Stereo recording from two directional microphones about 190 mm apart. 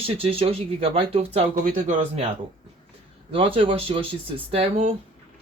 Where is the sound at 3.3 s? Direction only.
30° right (ahead or behind).